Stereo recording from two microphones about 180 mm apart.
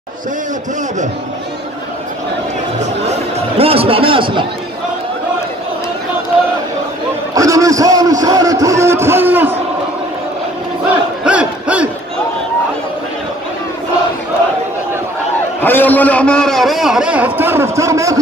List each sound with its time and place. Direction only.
3.3 s a man's voice: 35° right (ahead or behind)
7.3 s a man's voice: 20° right (ahead or behind)
11.2 s crowd: 5° right (ahead or behind)
15.6 s a man's voice: 10° left (ahead or behind); by 18.2 s 15° right (ahead or behind)